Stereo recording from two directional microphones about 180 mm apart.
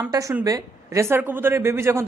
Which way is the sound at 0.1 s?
20° right (ahead or behind).